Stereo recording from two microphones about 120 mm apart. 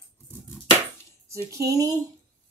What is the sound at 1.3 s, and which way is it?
Speech, 25° right (ahead or behind).